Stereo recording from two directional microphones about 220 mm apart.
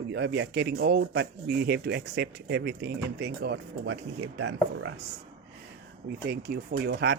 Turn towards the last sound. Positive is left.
turn(degrees=-50)  # may be behind; listen again after turning